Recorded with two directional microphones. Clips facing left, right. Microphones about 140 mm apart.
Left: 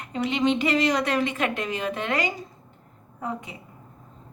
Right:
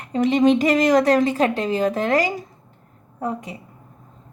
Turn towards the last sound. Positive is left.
turn(degrees=-40)  # may be behind; listen again after turning